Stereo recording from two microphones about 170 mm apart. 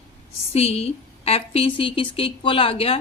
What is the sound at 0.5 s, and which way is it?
A woman's voice, 40° left (ahead or behind).